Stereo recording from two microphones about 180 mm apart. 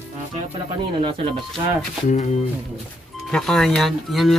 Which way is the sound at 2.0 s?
40° left (ahead or behind).